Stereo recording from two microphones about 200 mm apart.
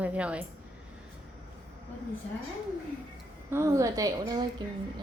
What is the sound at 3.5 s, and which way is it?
Speech, 15° right (ahead or behind).